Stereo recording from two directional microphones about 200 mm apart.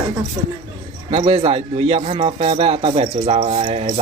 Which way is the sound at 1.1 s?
25° right (ahead or behind).